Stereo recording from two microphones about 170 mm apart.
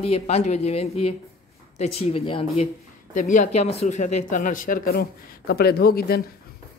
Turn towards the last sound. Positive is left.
turn(degrees=65)  # may be behind; listen again after turning